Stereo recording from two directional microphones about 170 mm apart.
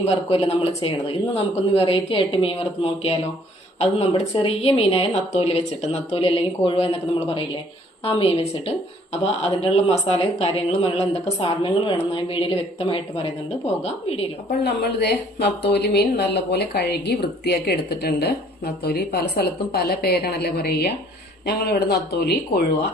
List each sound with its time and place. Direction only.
0.0 s a woman's voice: 35° left (ahead or behind)
14.6 s a woman's voice: 75° left (ahead or behind)